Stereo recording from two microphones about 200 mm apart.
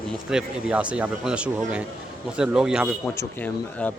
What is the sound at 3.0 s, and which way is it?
Speech, 10° left (ahead or behind).